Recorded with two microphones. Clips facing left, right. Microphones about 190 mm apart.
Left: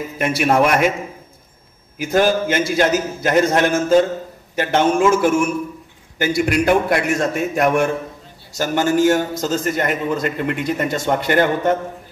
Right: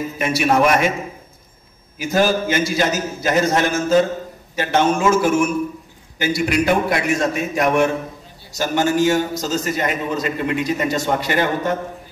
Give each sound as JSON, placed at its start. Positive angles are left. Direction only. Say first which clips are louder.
{"t": 0.2, "sound": "a man's voice", "louder": "left 1 dB", "side_deg": 55}
{"t": 2.0, "sound": "a man's voice", "louder": "left 1 dB", "side_deg": 55}